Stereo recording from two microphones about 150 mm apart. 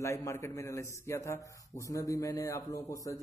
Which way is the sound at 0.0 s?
20° left (ahead or behind).